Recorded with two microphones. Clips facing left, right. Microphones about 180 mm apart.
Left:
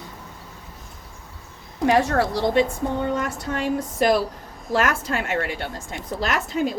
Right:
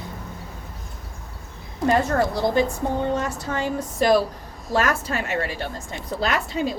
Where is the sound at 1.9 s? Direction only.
80° left.